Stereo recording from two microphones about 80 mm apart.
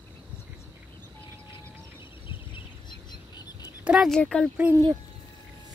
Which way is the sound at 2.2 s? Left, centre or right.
Left.